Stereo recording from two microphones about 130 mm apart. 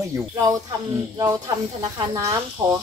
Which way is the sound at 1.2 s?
25° right (ahead or behind).